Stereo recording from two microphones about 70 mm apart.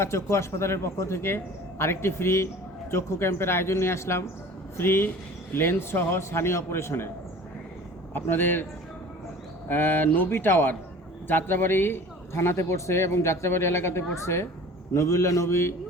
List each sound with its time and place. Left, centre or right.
0.0 s a man's voice: left
8.1 s a man's voice: left
9.6 s a man's voice: left